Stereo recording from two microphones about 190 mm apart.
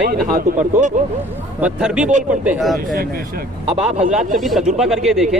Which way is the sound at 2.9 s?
50° right (ahead or behind).